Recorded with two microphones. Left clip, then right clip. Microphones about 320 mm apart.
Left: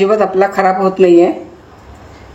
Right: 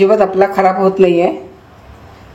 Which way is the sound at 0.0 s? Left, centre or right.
Right.